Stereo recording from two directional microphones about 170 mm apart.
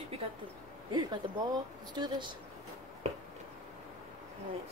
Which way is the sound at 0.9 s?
25° right (ahead or behind).